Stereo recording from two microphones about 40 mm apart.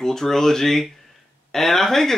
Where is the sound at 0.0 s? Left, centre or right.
Centre.